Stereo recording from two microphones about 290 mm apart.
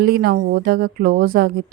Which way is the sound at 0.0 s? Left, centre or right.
Right.